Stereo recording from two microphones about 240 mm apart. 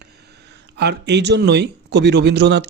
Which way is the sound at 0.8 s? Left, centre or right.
Right.